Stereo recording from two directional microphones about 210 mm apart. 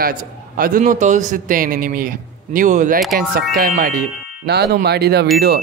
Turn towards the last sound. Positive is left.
turn(degrees=-50)  # may be behind; listen again after turning